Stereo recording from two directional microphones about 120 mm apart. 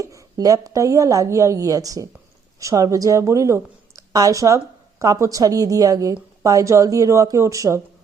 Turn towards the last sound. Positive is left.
turn(degrees=-25)  # may be behind; listen again after turning